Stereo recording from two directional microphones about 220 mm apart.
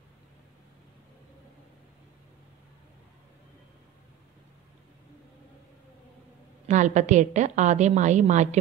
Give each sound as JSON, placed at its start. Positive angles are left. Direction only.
{"t": 6.7, "sound": "a woman's voice", "side_deg": -35}